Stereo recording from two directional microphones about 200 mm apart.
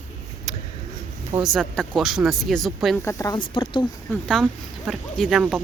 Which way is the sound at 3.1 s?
15° left (ahead or behind).